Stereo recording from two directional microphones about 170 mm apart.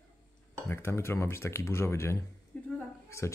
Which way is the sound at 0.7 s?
15° left (ahead or behind).